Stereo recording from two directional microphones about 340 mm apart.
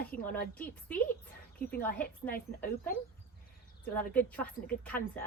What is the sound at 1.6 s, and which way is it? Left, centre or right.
Speech, left.